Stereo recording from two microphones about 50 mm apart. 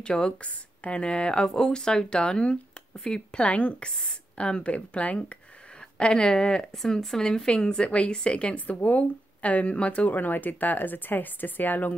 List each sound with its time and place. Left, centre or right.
0.0 s a woman's voice: centre; by 11.9 s left